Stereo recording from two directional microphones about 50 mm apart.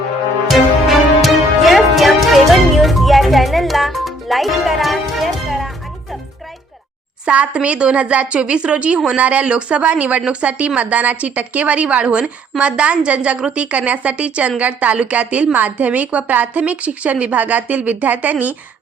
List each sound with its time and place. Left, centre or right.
0.4 s music: centre
7.3 s a woman's voice: right